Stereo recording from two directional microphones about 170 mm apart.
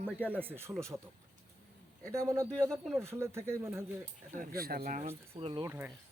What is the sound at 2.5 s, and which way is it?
Speech, 5° left (ahead or behind).